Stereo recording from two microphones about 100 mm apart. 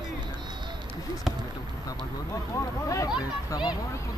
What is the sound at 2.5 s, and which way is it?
Speech, 30° left (ahead or behind).